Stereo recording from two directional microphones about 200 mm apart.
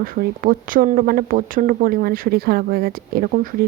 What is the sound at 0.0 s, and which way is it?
Speech, 45° right (ahead or behind).